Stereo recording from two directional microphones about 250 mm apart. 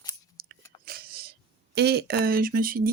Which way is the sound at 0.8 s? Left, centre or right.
Right.